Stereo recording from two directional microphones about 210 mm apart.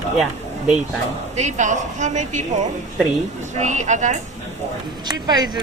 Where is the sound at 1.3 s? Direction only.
35° right (ahead or behind).